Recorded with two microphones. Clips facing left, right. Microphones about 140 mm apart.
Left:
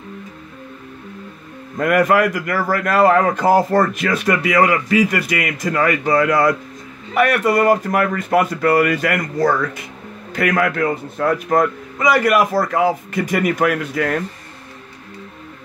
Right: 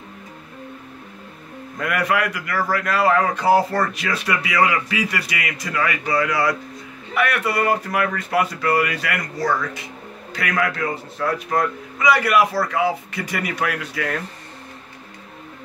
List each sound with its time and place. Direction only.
1.8 s a man's voice: 45° left (ahead or behind)